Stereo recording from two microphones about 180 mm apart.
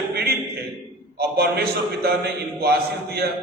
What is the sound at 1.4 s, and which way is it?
A man's voice, 60° right (ahead or behind).